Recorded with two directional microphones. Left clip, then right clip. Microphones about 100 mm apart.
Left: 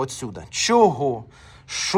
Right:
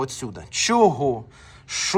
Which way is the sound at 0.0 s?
20° right (ahead or behind).